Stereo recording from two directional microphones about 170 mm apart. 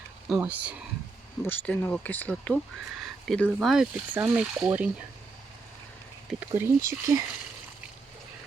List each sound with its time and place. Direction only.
0.3 s speech: 10° right (ahead or behind)
1.5 s speech: 10° left (ahead or behind); by 4.9 s 10° right (ahead or behind)
6.5 s speech: 15° right (ahead or behind)